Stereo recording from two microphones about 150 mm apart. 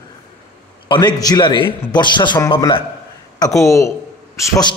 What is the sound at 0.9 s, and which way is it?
A man's voice, 30° left (ahead or behind).